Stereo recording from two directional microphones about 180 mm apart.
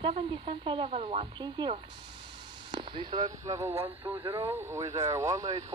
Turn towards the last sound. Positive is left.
turn(degrees=-15)  # may be behind; listen again after turning